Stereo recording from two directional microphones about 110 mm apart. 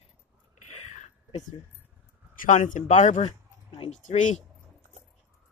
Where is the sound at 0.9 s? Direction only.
90° left.